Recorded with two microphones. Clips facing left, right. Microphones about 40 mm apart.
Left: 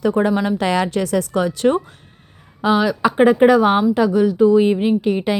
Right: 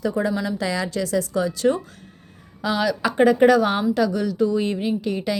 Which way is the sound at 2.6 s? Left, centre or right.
Left.